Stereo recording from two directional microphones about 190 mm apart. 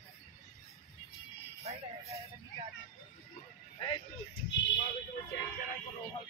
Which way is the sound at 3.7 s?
25° left (ahead or behind).